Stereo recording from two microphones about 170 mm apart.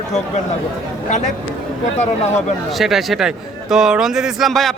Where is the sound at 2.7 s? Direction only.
Centre (ahead or behind).